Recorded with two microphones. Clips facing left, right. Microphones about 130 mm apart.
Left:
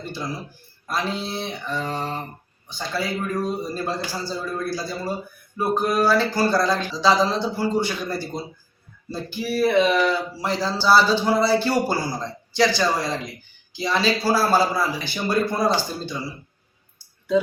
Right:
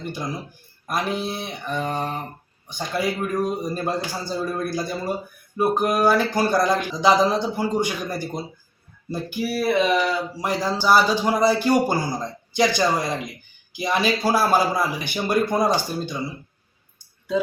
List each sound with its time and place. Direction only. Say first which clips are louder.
0.0 s speech: right 1 dB; 15° right (ahead or behind)